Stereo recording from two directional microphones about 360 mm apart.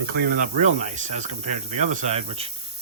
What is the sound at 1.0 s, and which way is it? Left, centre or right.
Speech, centre.